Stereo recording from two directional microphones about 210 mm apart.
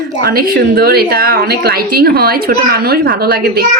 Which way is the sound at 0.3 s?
45° right (ahead or behind).